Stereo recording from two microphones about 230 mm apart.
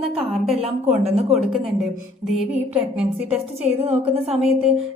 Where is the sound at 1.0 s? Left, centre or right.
Right.